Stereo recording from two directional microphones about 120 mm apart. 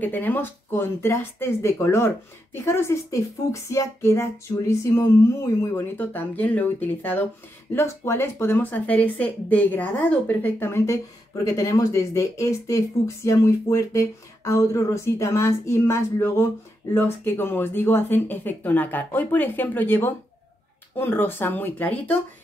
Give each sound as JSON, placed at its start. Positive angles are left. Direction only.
{"t": 0.0, "sound": "speech", "side_deg": 15}